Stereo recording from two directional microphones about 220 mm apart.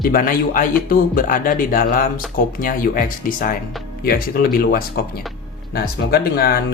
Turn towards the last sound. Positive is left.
turn(degrees=45)  # may be behind; listen again after turning